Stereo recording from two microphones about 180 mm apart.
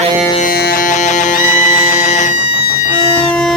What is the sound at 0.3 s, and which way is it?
Music, 55° left (ahead or behind).